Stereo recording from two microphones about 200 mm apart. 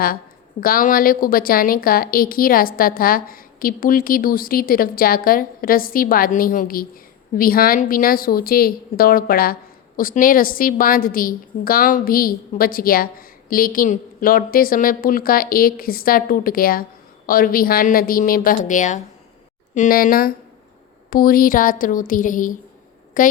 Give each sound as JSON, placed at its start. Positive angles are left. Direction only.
{"t": 0.6, "sound": "a woman's voice", "side_deg": 45}